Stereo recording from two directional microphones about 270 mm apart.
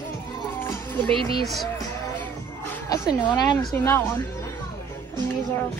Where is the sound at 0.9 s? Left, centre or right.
Centre.